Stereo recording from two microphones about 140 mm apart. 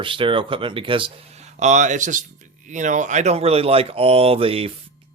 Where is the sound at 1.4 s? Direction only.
55° right (ahead or behind).